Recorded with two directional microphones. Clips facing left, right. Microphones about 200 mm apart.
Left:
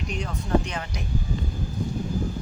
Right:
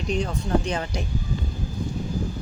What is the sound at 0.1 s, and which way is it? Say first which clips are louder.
Speech: right 2 dB; 30° right (ahead or behind).